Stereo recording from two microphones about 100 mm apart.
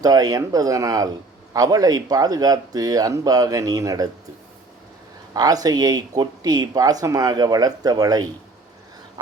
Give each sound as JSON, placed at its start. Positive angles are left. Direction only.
{"t": 0.0, "sound": "speech", "side_deg": -40}
{"t": 5.3, "sound": "speech", "side_deg": -40}
{"t": 9.2, "sound": "a sound", "side_deg": -45}